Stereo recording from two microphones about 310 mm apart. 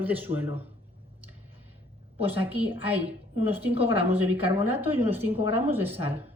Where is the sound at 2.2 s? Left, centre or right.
Centre.